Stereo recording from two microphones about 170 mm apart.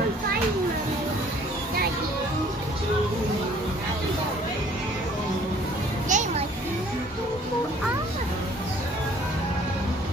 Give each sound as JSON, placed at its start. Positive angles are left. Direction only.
{"t": 6.0, "sound": "children playing", "side_deg": -45}